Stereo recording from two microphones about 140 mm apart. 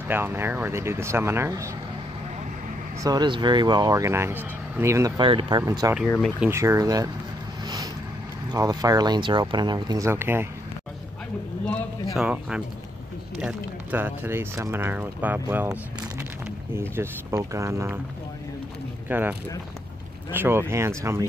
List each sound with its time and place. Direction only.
0.1 s speech: 15° right (ahead or behind)
3.0 s speech: 30° right (ahead or behind)
5.2 s speech: 40° right (ahead or behind)
5.6 s speech: 20° right (ahead or behind)
7.6 s vehicle: 25° right (ahead or behind)
8.5 s speech: 25° right (ahead or behind)
11.6 s a man's voice: 10° left (ahead or behind)
12.2 s speech: 5° right (ahead or behind)
19.0 s speech: 15° right (ahead or behind)